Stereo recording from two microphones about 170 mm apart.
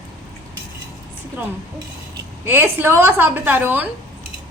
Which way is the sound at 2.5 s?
15° right (ahead or behind).